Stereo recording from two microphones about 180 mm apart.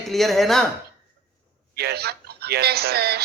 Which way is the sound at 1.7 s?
65° right (ahead or behind).